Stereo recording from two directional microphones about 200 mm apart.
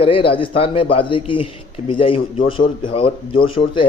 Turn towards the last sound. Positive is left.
turn(degrees=25)  # may be behind; listen again after turning